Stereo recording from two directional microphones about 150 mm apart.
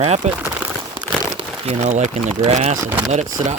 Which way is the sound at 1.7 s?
50° right (ahead or behind).